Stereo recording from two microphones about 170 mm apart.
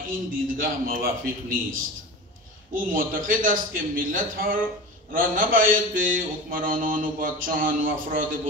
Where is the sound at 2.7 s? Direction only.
55° right (ahead or behind).